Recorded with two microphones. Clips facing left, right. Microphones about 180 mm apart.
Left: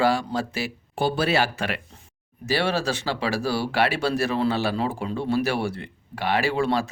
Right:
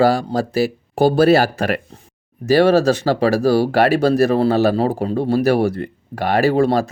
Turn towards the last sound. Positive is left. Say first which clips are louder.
# right 8 dB
turn(degrees=-40)  # may be behind; listen again after turning